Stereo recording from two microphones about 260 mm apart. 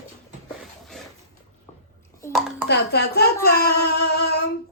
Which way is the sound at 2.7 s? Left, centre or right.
Left.